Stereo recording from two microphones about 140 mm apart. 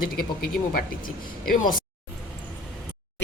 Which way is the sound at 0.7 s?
90° left.